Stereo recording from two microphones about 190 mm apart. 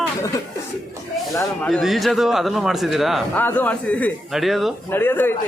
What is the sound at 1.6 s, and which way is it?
A man's voice, centre (ahead or behind).